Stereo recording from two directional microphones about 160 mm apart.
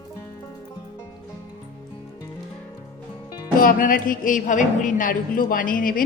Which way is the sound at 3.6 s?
60° left (ahead or behind).